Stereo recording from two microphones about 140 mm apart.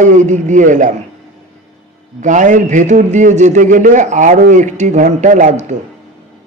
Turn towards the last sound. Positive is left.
turn(degrees=-65)  # may be behind; listen again after turning